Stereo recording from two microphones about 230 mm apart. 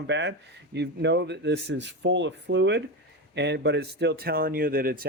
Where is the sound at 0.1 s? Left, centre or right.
Right.